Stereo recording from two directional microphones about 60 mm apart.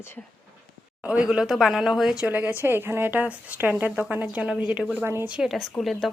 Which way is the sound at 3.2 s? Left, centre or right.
Right.